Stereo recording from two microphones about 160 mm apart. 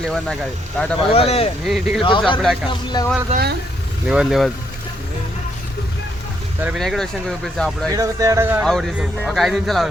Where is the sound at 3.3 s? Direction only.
90° right.